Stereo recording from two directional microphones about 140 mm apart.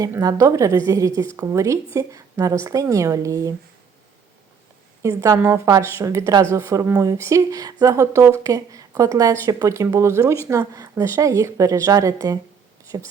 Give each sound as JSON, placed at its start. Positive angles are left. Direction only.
{"t": 0.0, "sound": "a woman's voice", "side_deg": -25}
{"t": 5.0, "sound": "a woman's voice", "side_deg": -20}